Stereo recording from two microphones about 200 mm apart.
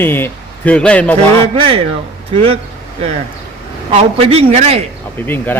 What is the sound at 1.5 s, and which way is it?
Speech, 30° right (ahead or behind).